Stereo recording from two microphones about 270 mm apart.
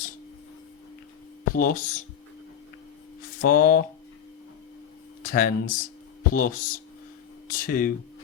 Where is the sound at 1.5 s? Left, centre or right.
Left.